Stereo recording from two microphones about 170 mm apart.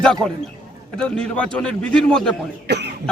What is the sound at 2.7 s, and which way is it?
Cough, 75° right (ahead or behind).